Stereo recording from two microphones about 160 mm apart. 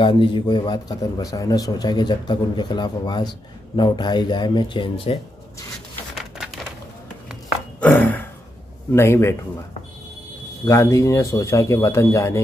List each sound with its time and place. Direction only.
0.0 s speech: 30° left (ahead or behind)
6.1 s typewriter: centre (ahead or behind)
7.8 s a sound: 10° left (ahead or behind)
8.9 s speech: 15° left (ahead or behind)
10.6 s speech: 20° left (ahead or behind)